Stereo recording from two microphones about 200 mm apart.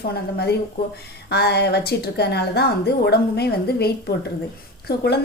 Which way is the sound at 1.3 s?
55° left (ahead or behind).